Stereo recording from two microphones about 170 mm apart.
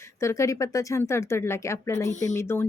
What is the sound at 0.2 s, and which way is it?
Speech, 15° left (ahead or behind).